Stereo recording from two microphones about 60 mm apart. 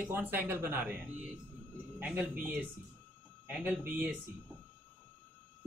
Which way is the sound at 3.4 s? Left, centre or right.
Right.